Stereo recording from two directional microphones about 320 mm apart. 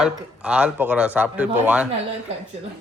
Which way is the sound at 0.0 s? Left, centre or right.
Centre.